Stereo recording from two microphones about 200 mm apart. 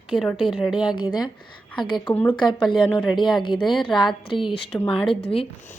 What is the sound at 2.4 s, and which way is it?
A woman's voice, 25° left (ahead or behind).